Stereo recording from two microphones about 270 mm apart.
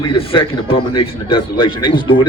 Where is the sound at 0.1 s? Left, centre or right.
Centre.